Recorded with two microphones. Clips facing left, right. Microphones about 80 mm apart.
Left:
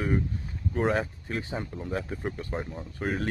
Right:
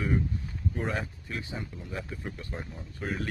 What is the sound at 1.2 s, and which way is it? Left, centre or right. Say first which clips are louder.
Speech: left 4 dB; left.